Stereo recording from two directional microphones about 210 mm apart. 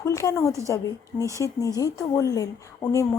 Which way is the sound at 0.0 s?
15° left (ahead or behind).